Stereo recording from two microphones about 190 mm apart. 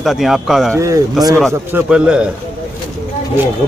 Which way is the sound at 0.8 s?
15° right (ahead or behind).